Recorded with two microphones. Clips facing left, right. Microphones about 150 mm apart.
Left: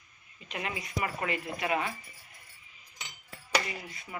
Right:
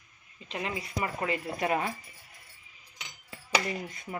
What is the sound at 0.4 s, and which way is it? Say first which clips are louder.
Speech: right 2 dB; 30° right (ahead or behind).